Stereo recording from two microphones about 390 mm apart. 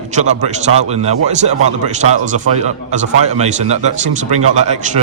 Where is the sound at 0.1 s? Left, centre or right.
Centre.